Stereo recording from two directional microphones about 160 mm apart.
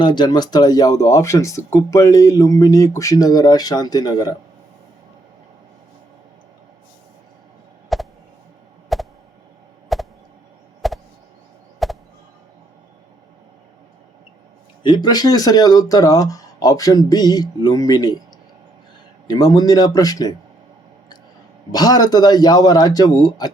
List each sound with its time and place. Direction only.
0.0 s speech: 30° left (ahead or behind)
7.9 s a sound: centre (ahead or behind)
11.8 s music: centre (ahead or behind)
14.8 s speech: 25° left (ahead or behind)
19.3 s speech: 25° left (ahead or behind)
21.7 s speech: 25° left (ahead or behind)